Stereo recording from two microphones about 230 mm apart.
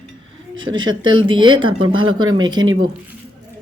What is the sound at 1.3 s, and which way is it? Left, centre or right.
Speech, right.